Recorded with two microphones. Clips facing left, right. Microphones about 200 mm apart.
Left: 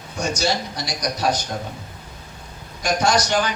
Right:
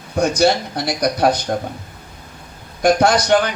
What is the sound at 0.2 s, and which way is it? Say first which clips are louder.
A man's voice: right 8 dB; 60° right (ahead or behind).